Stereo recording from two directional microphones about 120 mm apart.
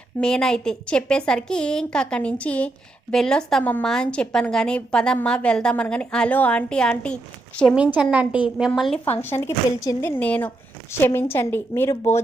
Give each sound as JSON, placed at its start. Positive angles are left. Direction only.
{"t": 0.2, "sound": "a woman's voice", "side_deg": 5}
{"t": 7.8, "sound": "a woman's voice", "side_deg": -15}
{"t": 9.0, "sound": "a woman's voice", "side_deg": 15}